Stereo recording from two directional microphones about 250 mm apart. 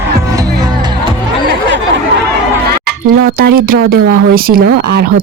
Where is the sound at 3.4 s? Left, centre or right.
Right.